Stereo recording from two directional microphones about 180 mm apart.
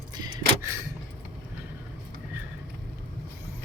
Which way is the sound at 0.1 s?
20° right (ahead or behind).